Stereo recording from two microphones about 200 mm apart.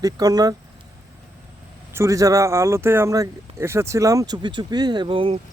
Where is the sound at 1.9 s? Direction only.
15° right (ahead or behind).